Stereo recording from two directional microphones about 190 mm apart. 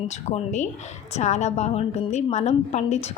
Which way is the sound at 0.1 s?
40° left (ahead or behind).